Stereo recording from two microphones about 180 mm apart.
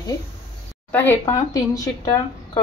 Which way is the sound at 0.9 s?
15° left (ahead or behind).